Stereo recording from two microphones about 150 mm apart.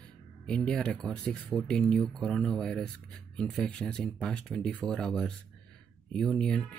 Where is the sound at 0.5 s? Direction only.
5° left (ahead or behind).